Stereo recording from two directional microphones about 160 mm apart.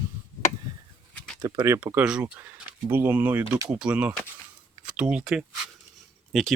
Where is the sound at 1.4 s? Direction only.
20° right (ahead or behind).